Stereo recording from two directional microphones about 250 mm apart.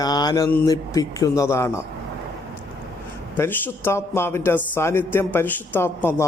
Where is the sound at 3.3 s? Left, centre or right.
Centre.